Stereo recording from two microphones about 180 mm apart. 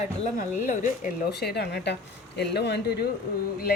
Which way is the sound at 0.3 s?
45° left (ahead or behind).